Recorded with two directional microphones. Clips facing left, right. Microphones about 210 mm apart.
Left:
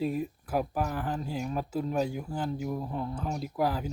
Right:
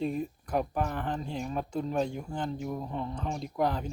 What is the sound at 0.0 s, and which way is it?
Speech, 5° left (ahead or behind).